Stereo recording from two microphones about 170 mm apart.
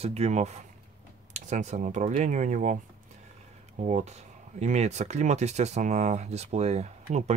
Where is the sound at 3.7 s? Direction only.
45° right (ahead or behind).